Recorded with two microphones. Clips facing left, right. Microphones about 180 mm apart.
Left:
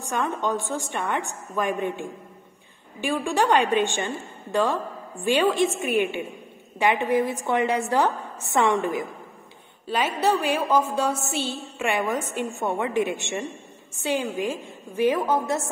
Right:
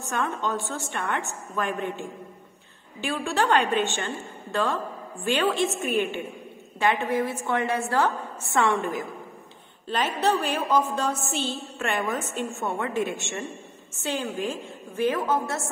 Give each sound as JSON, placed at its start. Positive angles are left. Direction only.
{"t": 0.0, "sound": "a woman's voice", "side_deg": 15}